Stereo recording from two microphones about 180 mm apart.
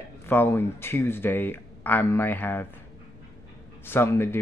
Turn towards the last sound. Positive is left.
turn(degrees=15)  # may be behind; listen again after turning